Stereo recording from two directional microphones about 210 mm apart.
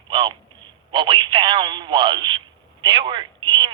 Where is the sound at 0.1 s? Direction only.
25° right (ahead or behind).